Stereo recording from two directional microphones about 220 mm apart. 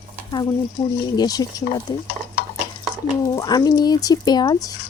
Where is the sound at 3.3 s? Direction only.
15° left (ahead or behind).